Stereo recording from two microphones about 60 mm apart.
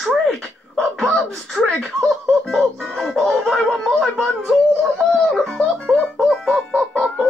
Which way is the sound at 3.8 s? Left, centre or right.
Centre.